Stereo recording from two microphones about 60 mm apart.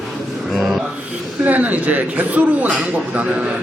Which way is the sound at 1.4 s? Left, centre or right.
Right.